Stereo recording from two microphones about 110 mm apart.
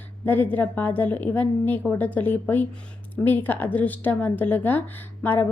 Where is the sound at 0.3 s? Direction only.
15° left (ahead or behind).